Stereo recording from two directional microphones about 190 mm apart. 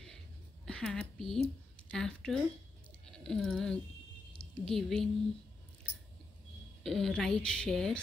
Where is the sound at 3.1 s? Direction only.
5° left (ahead or behind).